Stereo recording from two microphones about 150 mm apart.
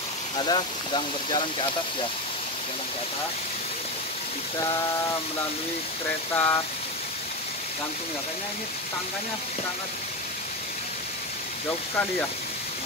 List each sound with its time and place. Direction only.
0.4 s speech: 30° left (ahead or behind)
6.3 s speech: 15° left (ahead or behind)